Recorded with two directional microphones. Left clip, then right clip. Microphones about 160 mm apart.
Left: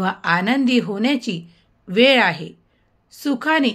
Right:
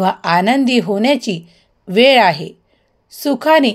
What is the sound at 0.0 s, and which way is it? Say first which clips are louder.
Speech: right 6 dB; 50° right (ahead or behind).